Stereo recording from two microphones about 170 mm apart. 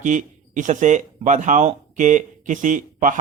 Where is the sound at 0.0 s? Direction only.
50° right (ahead or behind).